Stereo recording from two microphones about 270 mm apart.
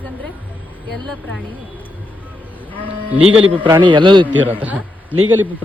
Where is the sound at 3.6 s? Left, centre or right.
Centre.